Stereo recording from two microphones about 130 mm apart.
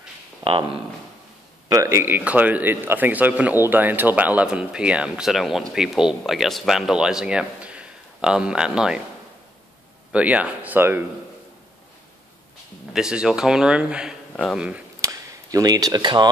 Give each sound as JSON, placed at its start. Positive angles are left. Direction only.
{"t": 0.4, "sound": "speech", "side_deg": -45}
{"t": 1.7, "sound": "speech", "side_deg": -25}
{"t": 10.1, "sound": "speech", "side_deg": -10}
{"t": 12.9, "sound": "speech", "side_deg": -5}
{"t": 15.0, "sound": "chop", "side_deg": -25}